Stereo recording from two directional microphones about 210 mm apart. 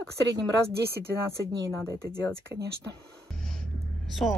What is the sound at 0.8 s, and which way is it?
Speech, 50° right (ahead or behind).